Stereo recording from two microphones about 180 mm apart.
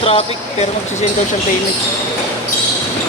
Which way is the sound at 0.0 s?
35° left (ahead or behind).